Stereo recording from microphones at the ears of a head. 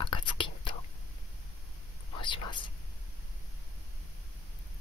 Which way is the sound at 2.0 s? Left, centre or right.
Left.